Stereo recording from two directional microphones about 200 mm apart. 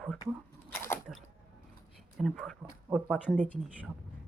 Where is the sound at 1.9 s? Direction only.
Centre (ahead or behind).